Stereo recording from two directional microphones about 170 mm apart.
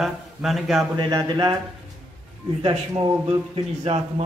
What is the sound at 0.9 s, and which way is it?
Speech, 25° right (ahead or behind).